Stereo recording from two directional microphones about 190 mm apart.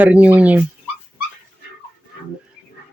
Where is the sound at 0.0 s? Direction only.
10° right (ahead or behind).